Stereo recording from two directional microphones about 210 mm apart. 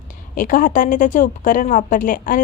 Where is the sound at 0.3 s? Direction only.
40° left (ahead or behind).